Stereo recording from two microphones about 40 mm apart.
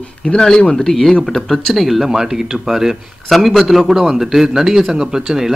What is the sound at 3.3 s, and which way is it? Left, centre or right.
A man's voice, centre.